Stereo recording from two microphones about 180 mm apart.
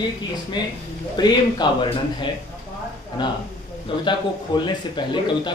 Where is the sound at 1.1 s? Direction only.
25° left (ahead or behind).